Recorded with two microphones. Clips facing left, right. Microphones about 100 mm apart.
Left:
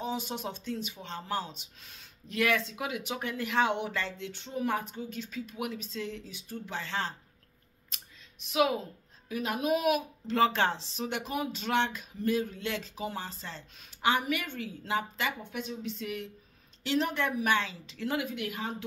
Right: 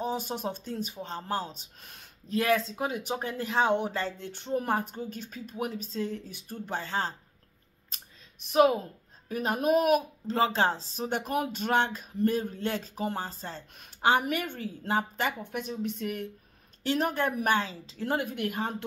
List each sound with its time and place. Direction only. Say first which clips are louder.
0.0 s speech: right 3 dB; 40° right (ahead or behind)
2.2 s speech: right 3 dB; 35° right (ahead or behind)
8.5 s speech: right 5 dB; 40° right (ahead or behind)
10.3 s speech: even; 30° right (ahead or behind); by 18.9 s 50° right (ahead or behind)